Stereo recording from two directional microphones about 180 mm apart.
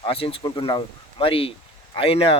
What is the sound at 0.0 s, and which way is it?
Speech, 30° left (ahead or behind).